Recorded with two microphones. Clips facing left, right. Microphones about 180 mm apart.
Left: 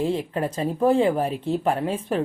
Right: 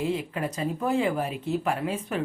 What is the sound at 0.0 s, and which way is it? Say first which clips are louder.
Speech: left 4 dB; 30° left (ahead or behind).